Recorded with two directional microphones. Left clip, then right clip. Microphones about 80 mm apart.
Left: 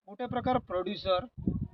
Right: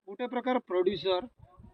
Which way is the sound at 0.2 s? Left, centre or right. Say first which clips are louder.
Even; left.